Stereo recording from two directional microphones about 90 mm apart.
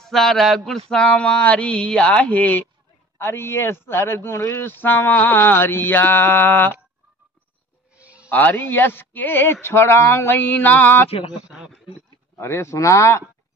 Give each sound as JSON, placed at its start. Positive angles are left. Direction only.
{"t": 0.0, "sound": "speech", "side_deg": 5}
{"t": 7.9, "sound": "a sound", "side_deg": -15}
{"t": 8.3, "sound": "speech", "side_deg": 20}
{"t": 11.1, "sound": "speech", "side_deg": 90}
{"t": 11.4, "sound": "speech", "side_deg": -10}
{"t": 12.4, "sound": "speech", "side_deg": 30}